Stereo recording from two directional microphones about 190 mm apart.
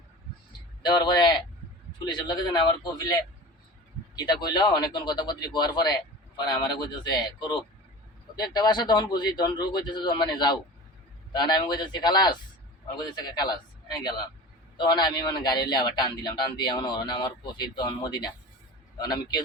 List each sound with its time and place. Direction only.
0.8 s a man's voice: 25° left (ahead or behind)